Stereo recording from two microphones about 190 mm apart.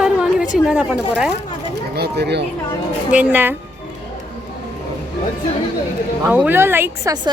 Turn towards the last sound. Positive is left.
turn(degrees=-20)  # may be behind; listen again after turning